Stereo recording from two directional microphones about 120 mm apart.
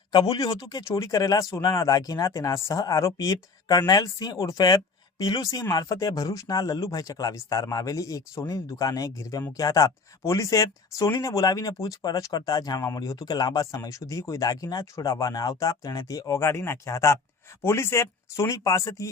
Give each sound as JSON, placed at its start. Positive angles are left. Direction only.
{"t": 0.1, "sound": "speech", "side_deg": 35}